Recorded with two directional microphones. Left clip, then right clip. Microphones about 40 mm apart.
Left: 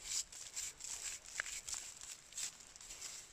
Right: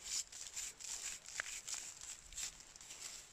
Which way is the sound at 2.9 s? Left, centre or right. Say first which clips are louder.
Left 1 dB; centre.